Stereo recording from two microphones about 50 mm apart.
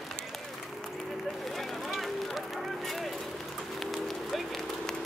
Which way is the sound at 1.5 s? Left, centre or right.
Centre.